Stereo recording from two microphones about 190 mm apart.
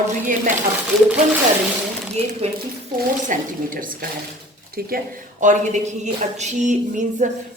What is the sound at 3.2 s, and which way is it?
A woman's voice, 45° right (ahead or behind).